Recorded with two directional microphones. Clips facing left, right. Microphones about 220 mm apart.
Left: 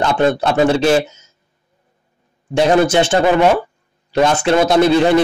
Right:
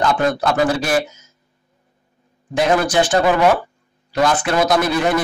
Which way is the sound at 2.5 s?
25° left (ahead or behind).